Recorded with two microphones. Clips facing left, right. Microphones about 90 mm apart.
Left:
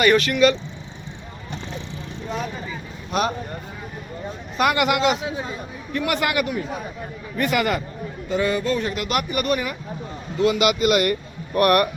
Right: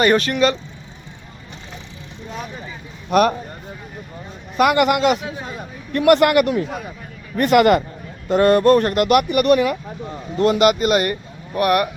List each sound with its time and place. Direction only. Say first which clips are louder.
0.0 s speech: right 1 dB; 35° right (ahead or behind)
3.1 s speech: right 7 dB; 55° right (ahead or behind)
4.5 s speech: right 4 dB; 50° right (ahead or behind)
5.9 s a man's voice: right 10 dB; 70° right (ahead or behind)
10.3 s speech: right 4 dB; 50° right (ahead or behind)
11.5 s speech: even; 15° right (ahead or behind)